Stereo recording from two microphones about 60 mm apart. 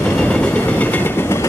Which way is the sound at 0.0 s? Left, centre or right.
Left.